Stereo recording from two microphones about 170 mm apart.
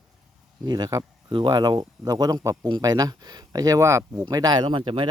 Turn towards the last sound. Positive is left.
turn(degrees=-30)  # may be behind; listen again after turning